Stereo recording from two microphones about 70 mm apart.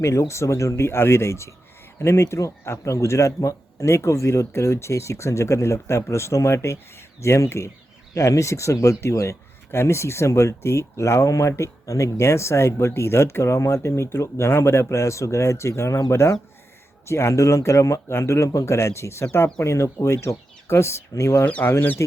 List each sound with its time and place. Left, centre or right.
0.0 s a man's voice: left
21.4 s speech: left